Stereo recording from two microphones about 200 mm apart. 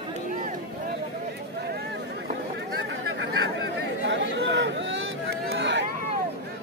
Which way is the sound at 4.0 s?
65° right (ahead or behind).